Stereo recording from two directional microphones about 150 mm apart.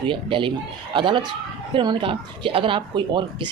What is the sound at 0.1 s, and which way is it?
Speech, 35° right (ahead or behind).